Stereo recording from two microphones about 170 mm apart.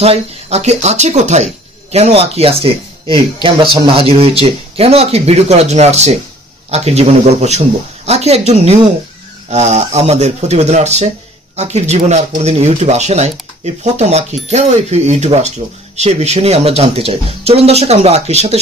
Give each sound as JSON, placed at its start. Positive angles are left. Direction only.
{"t": 0.0, "sound": "speech", "side_deg": -40}